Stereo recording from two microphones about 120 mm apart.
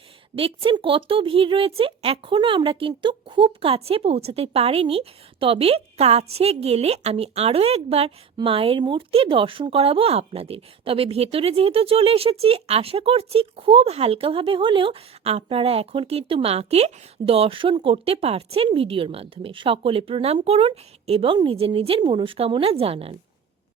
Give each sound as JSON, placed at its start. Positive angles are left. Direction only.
{"t": 0.3, "sound": "speech", "side_deg": -50}